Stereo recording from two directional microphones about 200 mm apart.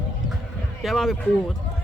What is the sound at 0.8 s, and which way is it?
Speech, centre (ahead or behind).